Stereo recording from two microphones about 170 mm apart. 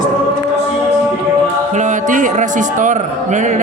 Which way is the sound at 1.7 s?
45° right (ahead or behind).